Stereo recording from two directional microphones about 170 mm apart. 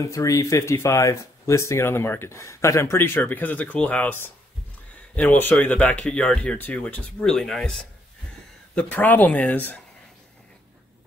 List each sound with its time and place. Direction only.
0.0 s speech: 20° left (ahead or behind)